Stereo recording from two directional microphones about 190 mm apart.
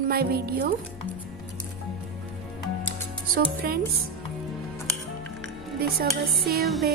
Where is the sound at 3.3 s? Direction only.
50° right (ahead or behind).